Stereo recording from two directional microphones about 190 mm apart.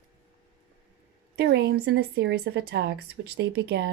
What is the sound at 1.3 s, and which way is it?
Speech, 65° right (ahead or behind).